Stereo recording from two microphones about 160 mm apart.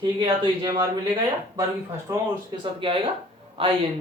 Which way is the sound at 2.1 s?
30° right (ahead or behind).